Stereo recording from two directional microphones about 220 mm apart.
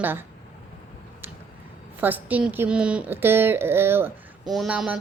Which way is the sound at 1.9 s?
10° right (ahead or behind).